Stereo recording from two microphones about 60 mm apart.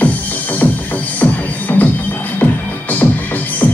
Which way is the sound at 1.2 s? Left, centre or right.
Left.